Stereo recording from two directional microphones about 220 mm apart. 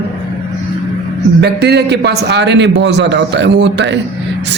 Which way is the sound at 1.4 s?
50° right (ahead or behind).